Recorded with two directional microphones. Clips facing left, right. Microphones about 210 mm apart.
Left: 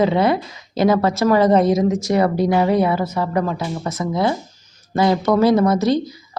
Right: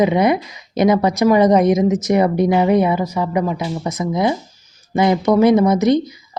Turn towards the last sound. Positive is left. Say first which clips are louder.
# right 3 dB
turn(degrees=-20)  # may be behind; listen again after turning